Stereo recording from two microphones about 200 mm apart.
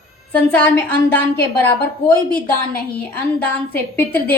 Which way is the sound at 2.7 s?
50° left (ahead or behind).